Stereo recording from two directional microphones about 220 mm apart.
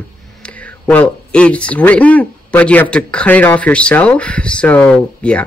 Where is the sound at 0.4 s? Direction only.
5° left (ahead or behind).